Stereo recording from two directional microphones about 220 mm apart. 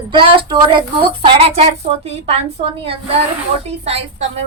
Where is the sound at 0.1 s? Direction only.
20° right (ahead or behind).